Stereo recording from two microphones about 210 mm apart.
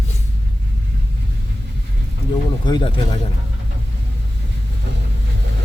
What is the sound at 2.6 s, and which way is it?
Speech, 20° left (ahead or behind).